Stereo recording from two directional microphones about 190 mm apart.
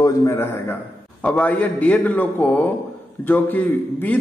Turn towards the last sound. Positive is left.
turn(degrees=10)  # may be behind; listen again after turning